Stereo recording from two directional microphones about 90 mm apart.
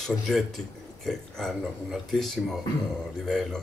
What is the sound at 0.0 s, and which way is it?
Speech, centre (ahead or behind).